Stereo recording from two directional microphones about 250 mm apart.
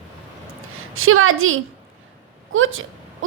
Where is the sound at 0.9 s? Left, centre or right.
Right.